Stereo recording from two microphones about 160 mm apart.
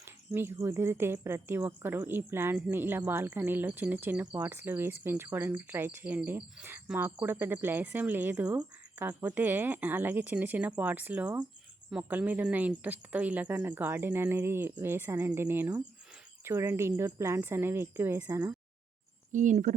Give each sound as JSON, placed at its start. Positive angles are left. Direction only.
{"t": 0.0, "sound": "speech", "side_deg": -15}
{"t": 19.3, "sound": "speech", "side_deg": -50}